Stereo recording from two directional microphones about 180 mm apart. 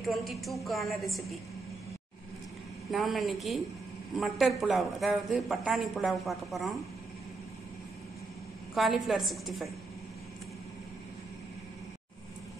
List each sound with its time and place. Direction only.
0.0 s speech: centre (ahead or behind)
2.9 s speech: centre (ahead or behind)
8.7 s speech: centre (ahead or behind)